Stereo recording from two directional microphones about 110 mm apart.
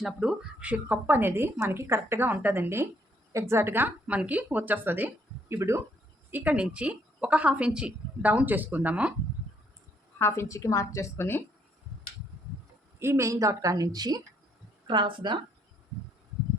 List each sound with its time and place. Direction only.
0.0 s a woman's voice: 5° right (ahead or behind); by 5.8 s 25° right (ahead or behind)
6.3 s a woman's voice: 15° right (ahead or behind)
10.2 s a woman's voice: 20° left (ahead or behind)
13.0 s a woman's voice: 25° right (ahead or behind); by 15.4 s 45° right (ahead or behind)